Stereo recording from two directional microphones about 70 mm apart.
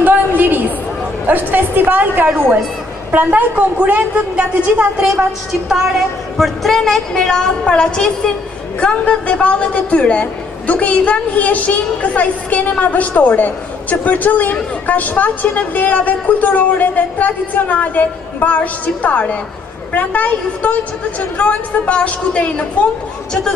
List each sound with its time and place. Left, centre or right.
0.0 s a sound: right
1.2 s a woman's voice: right
6.3 s a woman's voice: centre